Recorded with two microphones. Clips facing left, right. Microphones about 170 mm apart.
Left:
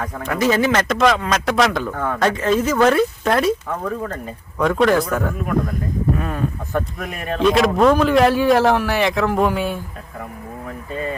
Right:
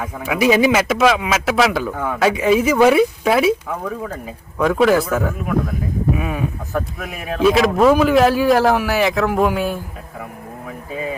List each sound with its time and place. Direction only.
0.0 s speech: 5° right (ahead or behind)
10.9 s speech: 5° right (ahead or behind)